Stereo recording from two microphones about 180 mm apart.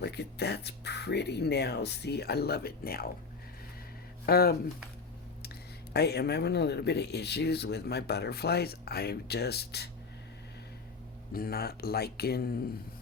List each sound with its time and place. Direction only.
0.0 s speech: 65° left (ahead or behind)
4.3 s speech: 60° left (ahead or behind)
5.9 s speech: 65° left (ahead or behind)
11.3 s speech: 55° left (ahead or behind)